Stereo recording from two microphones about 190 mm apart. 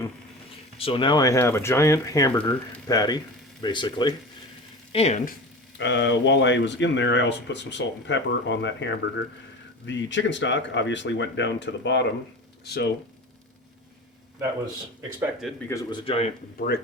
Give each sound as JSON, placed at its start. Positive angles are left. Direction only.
{"t": 0.8, "sound": "speech", "side_deg": 25}
{"t": 2.3, "sound": "speech", "side_deg": 5}
{"t": 2.8, "sound": "speech", "side_deg": 20}
{"t": 5.7, "sound": "speech", "side_deg": 65}
{"t": 15.7, "sound": "speech", "side_deg": 20}
{"t": 16.6, "sound": "speech", "side_deg": 55}